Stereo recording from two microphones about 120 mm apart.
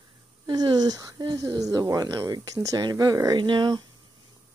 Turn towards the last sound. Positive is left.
turn(degrees=-35)  # may be behind; listen again after turning